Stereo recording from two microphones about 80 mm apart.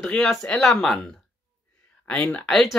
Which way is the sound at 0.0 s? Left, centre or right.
Centre.